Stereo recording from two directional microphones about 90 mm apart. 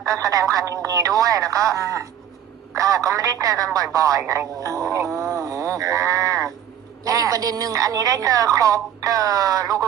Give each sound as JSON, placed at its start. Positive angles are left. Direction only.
{"t": 0.0, "sound": "speech", "side_deg": -35}